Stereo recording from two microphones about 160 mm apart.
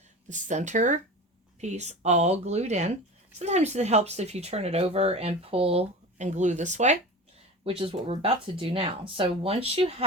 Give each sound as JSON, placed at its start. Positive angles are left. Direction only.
{"t": 0.3, "sound": "speech", "side_deg": -50}
{"t": 7.6, "sound": "speech", "side_deg": -35}